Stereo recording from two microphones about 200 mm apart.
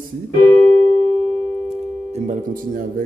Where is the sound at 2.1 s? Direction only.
35° right (ahead or behind).